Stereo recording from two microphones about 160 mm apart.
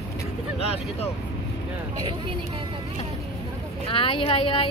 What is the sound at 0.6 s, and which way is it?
Vehicle, 40° left (ahead or behind).